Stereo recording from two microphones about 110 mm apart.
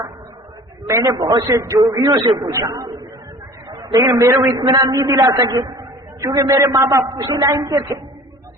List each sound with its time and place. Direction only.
0.9 s a woman's voice: 30° right (ahead or behind)
4.0 s a man's voice: 30° right (ahead or behind)
4.5 s a man's voice: 40° right (ahead or behind)